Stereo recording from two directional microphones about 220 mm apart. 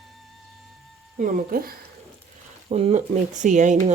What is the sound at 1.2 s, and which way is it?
Speech, 40° right (ahead or behind).